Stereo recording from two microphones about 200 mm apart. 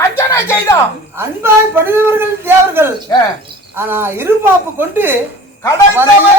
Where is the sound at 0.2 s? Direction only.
15° left (ahead or behind).